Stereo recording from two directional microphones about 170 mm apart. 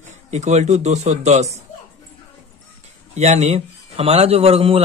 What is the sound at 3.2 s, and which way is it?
Speech, 40° right (ahead or behind).